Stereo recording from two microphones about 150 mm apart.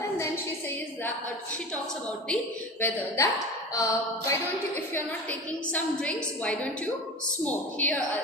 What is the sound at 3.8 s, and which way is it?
Speech, 20° left (ahead or behind).